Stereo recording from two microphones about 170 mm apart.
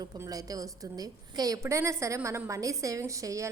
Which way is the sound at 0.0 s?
20° right (ahead or behind).